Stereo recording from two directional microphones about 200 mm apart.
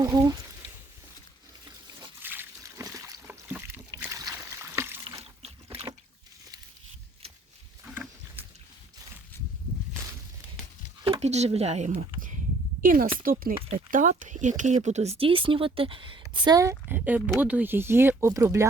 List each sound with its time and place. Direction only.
0.0 s speech: 15° right (ahead or behind)
1.6 s trickle: 15° right (ahead or behind)
5.0 s boat: 30° right (ahead or behind)
7.9 s wild animals: 10° right (ahead or behind)
11.0 s a sound: 30° right (ahead or behind)
12.8 s a woman's voice: 45° right (ahead or behind); by 18.6 s 15° right (ahead or behind)